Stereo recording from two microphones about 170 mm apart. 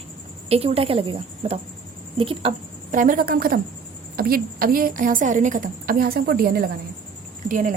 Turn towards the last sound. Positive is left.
turn(degrees=-55)  # may be behind; listen again after turning